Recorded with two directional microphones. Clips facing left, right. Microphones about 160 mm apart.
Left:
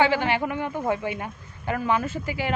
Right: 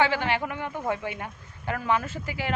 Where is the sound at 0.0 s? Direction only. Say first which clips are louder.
Left 3 dB; 10° left (ahead or behind).